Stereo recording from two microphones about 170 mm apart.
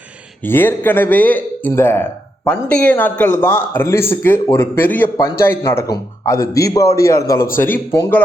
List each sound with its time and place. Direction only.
0.4 s a man's voice: 10° left (ahead or behind)